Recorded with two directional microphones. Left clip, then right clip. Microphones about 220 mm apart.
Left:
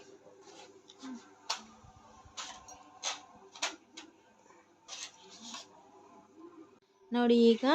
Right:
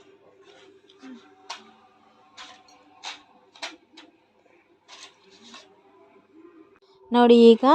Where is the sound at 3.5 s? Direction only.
40° left (ahead or behind).